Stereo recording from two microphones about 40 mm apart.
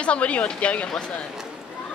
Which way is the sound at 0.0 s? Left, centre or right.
Left.